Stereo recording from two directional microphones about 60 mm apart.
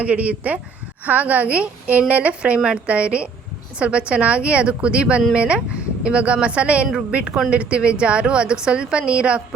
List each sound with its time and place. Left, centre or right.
0.0 s a woman's voice: right